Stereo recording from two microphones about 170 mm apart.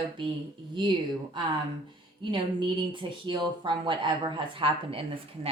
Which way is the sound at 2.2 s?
30° right (ahead or behind).